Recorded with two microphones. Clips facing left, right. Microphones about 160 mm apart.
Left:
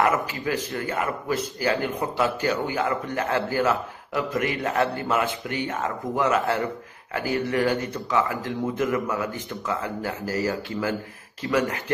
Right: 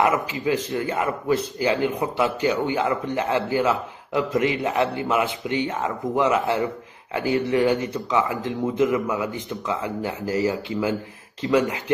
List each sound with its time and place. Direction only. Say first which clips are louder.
0.0 s a man's voice: right 2 dB; 20° right (ahead or behind)